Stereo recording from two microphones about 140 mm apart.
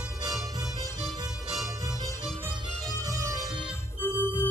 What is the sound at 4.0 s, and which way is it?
Organ, 15° left (ahead or behind).